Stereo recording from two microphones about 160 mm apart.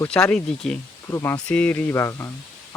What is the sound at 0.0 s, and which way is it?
Speech, 5° left (ahead or behind).